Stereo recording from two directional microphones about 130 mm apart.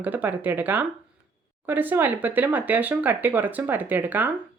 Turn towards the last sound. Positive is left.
turn(degrees=-15)  # may be behind; listen again after turning